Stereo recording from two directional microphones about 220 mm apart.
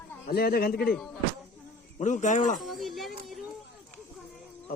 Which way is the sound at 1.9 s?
35° left (ahead or behind).